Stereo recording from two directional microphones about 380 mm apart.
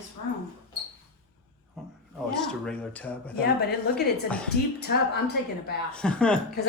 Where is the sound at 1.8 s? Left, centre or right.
Centre.